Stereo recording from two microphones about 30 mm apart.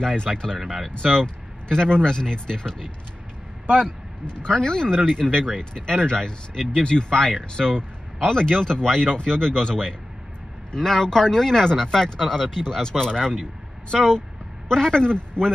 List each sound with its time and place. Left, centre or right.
0.0 s speech: left